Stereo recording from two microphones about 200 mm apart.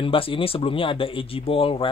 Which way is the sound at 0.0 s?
25° left (ahead or behind).